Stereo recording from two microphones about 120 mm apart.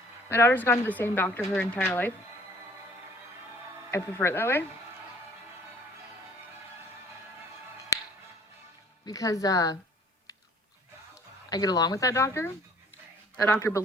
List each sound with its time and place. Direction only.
0.3 s speech: 20° left (ahead or behind)
3.9 s speech: 20° left (ahead or behind)
7.9 s music: 25° left (ahead or behind)
9.0 s speech: 30° left (ahead or behind)
11.4 s speech: 30° left (ahead or behind)